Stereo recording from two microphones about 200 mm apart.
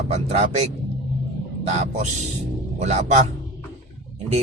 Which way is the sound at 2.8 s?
35° right (ahead or behind).